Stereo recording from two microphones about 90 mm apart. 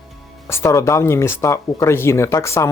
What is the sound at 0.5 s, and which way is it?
Speech, 30° left (ahead or behind).